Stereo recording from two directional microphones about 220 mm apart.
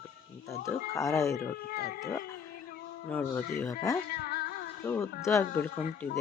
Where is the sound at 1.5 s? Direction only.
45° left (ahead or behind).